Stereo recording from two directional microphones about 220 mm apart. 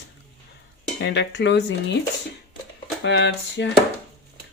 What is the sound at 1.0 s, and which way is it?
Speech, 50° left (ahead or behind).